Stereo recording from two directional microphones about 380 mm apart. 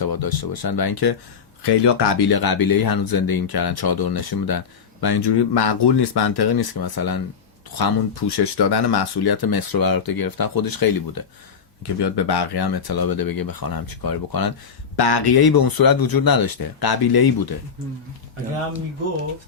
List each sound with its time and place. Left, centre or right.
0.1 s speech: left
1.6 s speech: left
8.2 s speech: left
11.9 s speech: left
14.9 s speech: left